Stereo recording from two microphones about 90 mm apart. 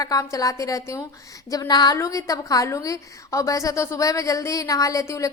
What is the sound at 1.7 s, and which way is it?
Speech, 50° left (ahead or behind).